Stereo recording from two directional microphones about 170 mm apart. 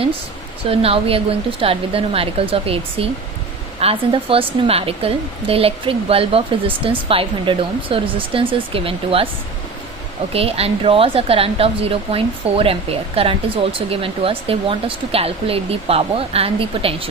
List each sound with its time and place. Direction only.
0.7 s speech: 35° right (ahead or behind)
10.3 s speech: 35° right (ahead or behind)